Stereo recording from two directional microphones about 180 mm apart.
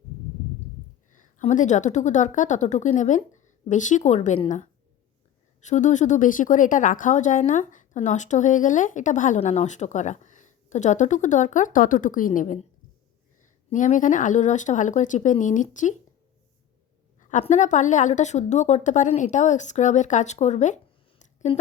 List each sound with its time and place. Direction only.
1.4 s a woman's voice: 45° left (ahead or behind)
13.7 s a woman's voice: 45° left (ahead or behind)
17.2 s a woman's voice: 45° left (ahead or behind)
21.2 s a sound: 40° left (ahead or behind)